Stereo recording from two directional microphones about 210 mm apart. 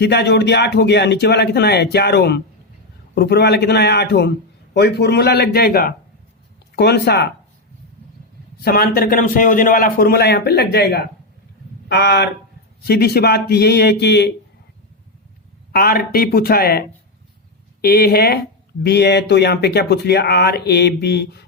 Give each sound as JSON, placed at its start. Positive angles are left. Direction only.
{"t": 0.0, "sound": "speech", "side_deg": 55}
{"t": 8.6, "sound": "speech", "side_deg": 45}
{"t": 15.7, "sound": "speech", "side_deg": 45}
{"t": 17.8, "sound": "speech", "side_deg": 50}